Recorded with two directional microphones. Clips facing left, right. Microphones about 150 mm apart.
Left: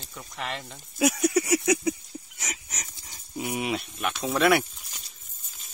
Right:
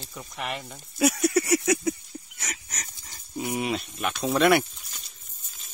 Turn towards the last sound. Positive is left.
turn(degrees=0)  # may be behind; listen again after turning